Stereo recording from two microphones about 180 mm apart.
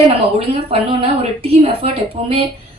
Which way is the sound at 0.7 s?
30° right (ahead or behind).